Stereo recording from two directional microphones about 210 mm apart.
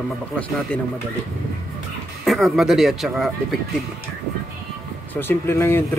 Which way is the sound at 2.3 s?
Centre (ahead or behind).